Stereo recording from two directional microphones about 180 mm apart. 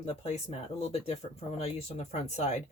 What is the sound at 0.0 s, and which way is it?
Speech, 35° left (ahead or behind).